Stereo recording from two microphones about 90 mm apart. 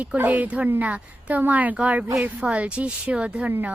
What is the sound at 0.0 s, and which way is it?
A woman's voice, 20° right (ahead or behind).